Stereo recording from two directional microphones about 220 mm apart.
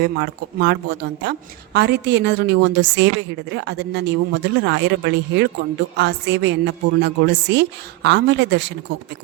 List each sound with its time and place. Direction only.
0.0 s a woman's voice: 50° right (ahead or behind)